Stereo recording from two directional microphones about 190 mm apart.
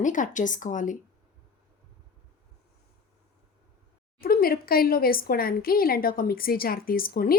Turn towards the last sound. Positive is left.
turn(degrees=50)  # may be behind; listen again after turning